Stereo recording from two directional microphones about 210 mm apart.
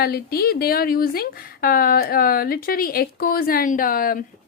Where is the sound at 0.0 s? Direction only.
45° left (ahead or behind).